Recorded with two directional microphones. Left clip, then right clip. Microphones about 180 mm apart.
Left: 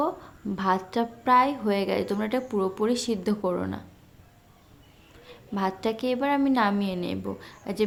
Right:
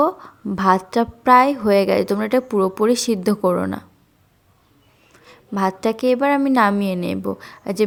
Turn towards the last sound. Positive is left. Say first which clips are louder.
# right 8 dB
turn(degrees=-45)  # may be behind; listen again after turning